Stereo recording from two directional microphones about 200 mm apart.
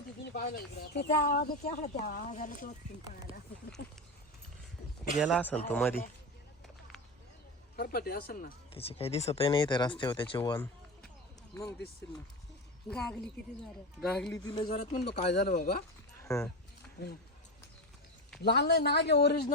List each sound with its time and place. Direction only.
0.3 s speech: 50° left (ahead or behind)
1.8 s speech: 35° left (ahead or behind)
5.2 s speech: 5° left (ahead or behind)
7.8 s speech: 50° left (ahead or behind)
8.7 s speech: 30° left (ahead or behind)
12.9 s a woman's voice: 5° left (ahead or behind)
14.3 s speech: 20° left (ahead or behind)
14.9 s a woman's voice: 55° left (ahead or behind)
16.3 s a woman's voice: centre (ahead or behind)
17.0 s a woman's voice: 55° left (ahead or behind)
18.4 s a woman's voice: 55° left (ahead or behind)